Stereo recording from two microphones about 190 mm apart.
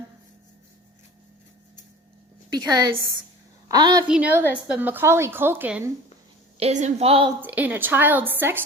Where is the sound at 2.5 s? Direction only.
20° right (ahead or behind).